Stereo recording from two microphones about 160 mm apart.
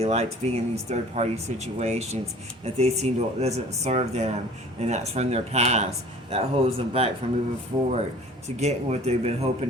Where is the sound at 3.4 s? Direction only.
45° right (ahead or behind).